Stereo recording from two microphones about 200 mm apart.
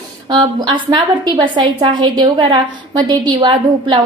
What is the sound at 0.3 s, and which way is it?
A woman's voice, 25° right (ahead or behind).